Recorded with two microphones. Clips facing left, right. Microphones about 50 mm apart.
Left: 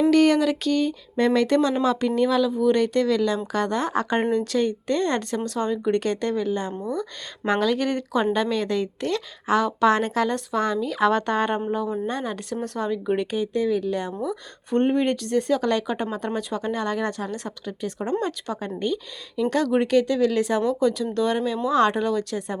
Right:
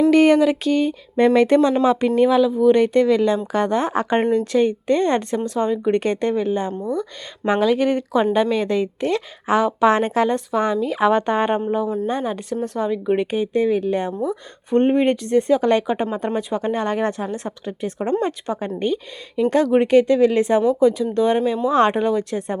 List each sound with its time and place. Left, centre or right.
0.1 s speech: right
6.7 s speech: centre
13.3 s speech: right
20.6 s speech: centre